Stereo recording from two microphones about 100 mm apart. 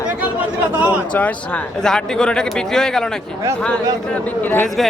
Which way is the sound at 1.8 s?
5° left (ahead or behind).